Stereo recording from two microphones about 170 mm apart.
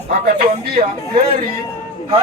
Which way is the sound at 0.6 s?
65° right (ahead or behind).